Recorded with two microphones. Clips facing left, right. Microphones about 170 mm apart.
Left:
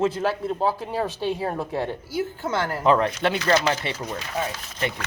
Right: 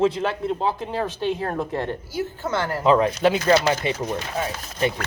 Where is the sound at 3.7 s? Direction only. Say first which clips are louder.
Right 3 dB; 20° right (ahead or behind).